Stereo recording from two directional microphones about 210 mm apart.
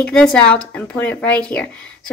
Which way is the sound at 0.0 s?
5° left (ahead or behind).